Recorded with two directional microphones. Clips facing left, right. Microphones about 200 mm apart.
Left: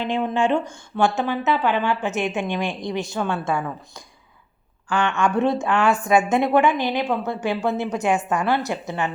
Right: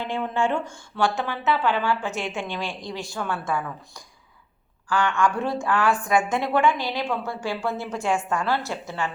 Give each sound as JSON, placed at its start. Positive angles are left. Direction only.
{"t": 0.0, "sound": "a woman's voice", "side_deg": 20}